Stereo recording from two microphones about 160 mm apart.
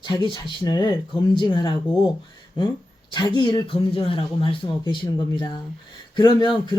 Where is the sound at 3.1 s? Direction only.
30° left (ahead or behind).